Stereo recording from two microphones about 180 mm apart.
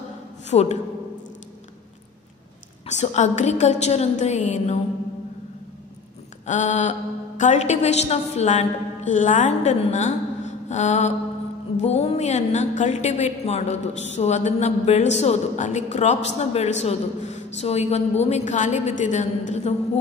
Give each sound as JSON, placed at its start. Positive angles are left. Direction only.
{"t": 0.5, "sound": "a woman's voice", "side_deg": 35}
{"t": 2.9, "sound": "a woman's voice", "side_deg": 40}
{"t": 6.4, "sound": "a woman's voice", "side_deg": 45}